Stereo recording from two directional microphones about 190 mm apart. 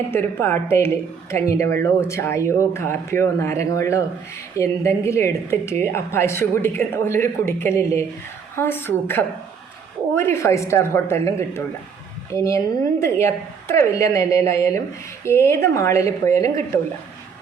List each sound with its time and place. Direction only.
0.1 s a woman's voice: 10° left (ahead or behind)